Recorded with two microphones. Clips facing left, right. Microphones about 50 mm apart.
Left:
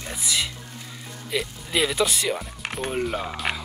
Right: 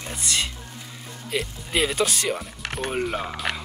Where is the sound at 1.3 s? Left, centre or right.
Centre.